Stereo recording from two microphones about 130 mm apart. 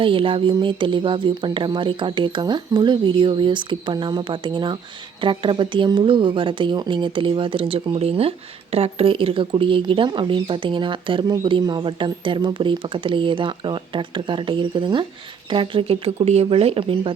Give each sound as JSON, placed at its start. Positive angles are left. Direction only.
{"t": 0.0, "sound": "speech", "side_deg": -45}